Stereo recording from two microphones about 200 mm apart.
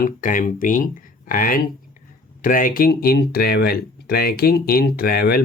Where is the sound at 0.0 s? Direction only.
40° left (ahead or behind).